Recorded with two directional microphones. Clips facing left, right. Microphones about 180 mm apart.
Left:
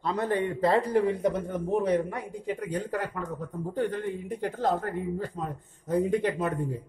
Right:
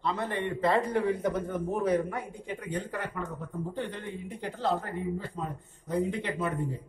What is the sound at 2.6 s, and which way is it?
A man's voice, 40° left (ahead or behind).